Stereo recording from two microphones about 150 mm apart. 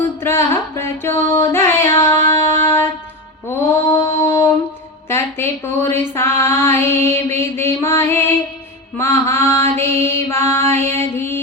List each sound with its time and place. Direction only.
0.2 s music: 15° left (ahead or behind)
3.5 s mantra: 15° left (ahead or behind)
5.0 s female singing: 15° left (ahead or behind)
9.0 s mantra: 15° left (ahead or behind)
10.7 s music: 15° left (ahead or behind)